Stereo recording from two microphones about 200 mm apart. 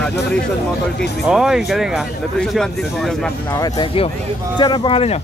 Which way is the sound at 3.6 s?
20° left (ahead or behind).